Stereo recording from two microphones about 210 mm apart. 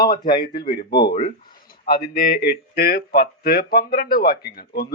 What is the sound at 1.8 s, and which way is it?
A man's voice, 45° left (ahead or behind).